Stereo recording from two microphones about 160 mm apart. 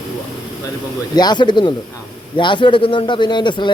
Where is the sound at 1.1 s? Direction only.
25° left (ahead or behind).